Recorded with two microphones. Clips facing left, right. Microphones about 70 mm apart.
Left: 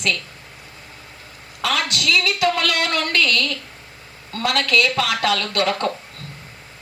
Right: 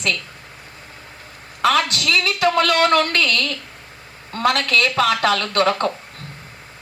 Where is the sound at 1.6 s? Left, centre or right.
Right.